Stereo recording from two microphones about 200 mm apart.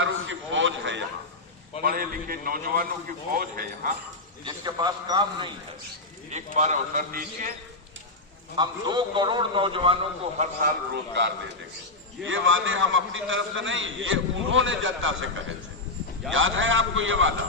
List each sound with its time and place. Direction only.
0.0 s a sound: 70° right (ahead or behind)
1.8 s a man's voice: 45° right (ahead or behind)
4.4 s a man's voice: 20° right (ahead or behind)
6.3 s a man's voice: 35° right (ahead or behind)
8.5 s a man's voice: 20° right (ahead or behind)
10.3 s a man's voice: 40° right (ahead or behind); by 11.3 s 60° right (ahead or behind)
12.2 s a man's voice: 75° right (ahead or behind)